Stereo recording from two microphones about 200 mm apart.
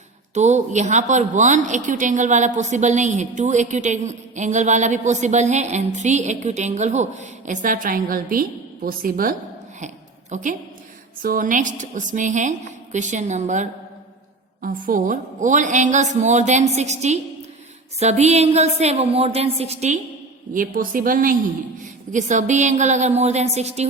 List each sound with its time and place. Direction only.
0.3 s a woman's voice: 35° right (ahead or behind)
9.8 s a sound: 35° right (ahead or behind)
11.2 s a woman's voice: 45° right (ahead or behind)
20.5 s a woman's voice: 45° right (ahead or behind)